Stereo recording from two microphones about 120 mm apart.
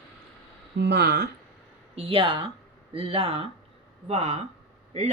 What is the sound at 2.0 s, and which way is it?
A man's voice, 50° right (ahead or behind).